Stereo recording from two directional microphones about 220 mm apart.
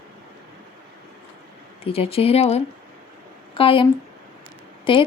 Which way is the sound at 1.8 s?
25° left (ahead or behind).